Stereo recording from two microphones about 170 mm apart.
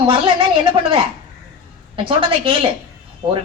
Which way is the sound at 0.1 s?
30° right (ahead or behind).